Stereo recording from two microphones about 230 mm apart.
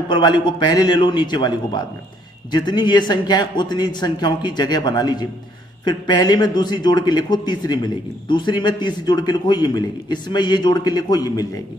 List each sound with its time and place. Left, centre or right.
0.1 s a man's voice: centre